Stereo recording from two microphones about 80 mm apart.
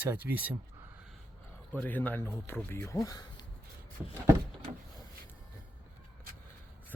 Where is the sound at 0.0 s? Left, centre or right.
Right.